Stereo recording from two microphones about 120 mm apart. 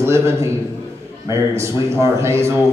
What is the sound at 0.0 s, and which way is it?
A man's voice, 20° right (ahead or behind).